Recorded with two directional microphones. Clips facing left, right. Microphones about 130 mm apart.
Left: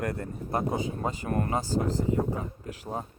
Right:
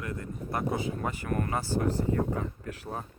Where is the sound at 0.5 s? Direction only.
25° left (ahead or behind).